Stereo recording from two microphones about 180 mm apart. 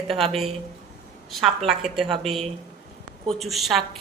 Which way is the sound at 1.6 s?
Centre (ahead or behind).